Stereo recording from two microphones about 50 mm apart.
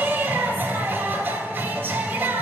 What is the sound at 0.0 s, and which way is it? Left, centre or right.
Music, right.